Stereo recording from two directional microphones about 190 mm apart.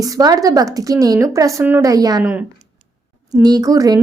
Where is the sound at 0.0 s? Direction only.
20° right (ahead or behind).